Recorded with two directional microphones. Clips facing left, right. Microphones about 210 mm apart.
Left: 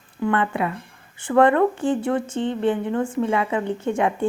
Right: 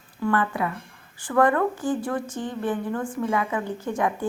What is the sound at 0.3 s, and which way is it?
A woman's voice, 25° left (ahead or behind).